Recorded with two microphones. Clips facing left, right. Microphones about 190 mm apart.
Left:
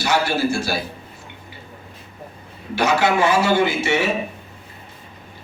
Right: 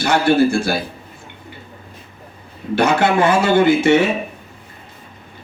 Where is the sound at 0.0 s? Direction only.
55° right (ahead or behind).